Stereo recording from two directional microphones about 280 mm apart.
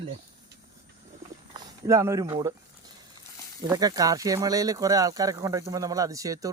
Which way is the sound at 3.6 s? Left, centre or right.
Centre.